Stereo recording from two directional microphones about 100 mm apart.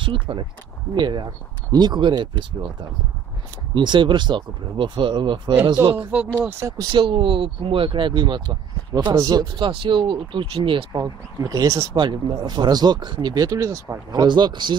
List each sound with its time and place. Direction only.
0.0 s speech: 55° right (ahead or behind)
6.0 s speech: 15° right (ahead or behind)
6.6 s speech: 40° right (ahead or behind)
7.0 s speech: 60° right (ahead or behind); by 9.7 s 40° right (ahead or behind)
9.7 s speech: 55° right (ahead or behind)
10.9 s speech: 40° right (ahead or behind)
11.9 s speech: 50° right (ahead or behind); by 13.9 s 30° right (ahead or behind)
14.1 s speech: 50° right (ahead or behind)